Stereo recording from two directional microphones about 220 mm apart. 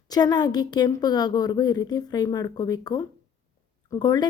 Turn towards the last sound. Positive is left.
turn(degrees=20)  # may be behind; listen again after turning